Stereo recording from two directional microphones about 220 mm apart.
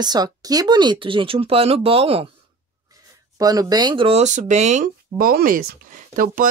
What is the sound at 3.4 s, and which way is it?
Speech, 15° right (ahead or behind).